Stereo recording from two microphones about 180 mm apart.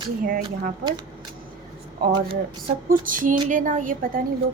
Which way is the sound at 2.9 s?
50° right (ahead or behind).